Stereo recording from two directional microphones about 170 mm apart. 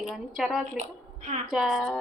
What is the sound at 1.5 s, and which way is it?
Speech, 5° right (ahead or behind).